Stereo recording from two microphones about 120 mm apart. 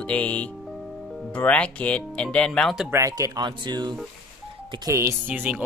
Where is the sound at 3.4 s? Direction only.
40° right (ahead or behind).